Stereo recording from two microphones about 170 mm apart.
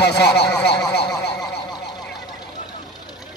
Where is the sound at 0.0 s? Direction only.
80° left.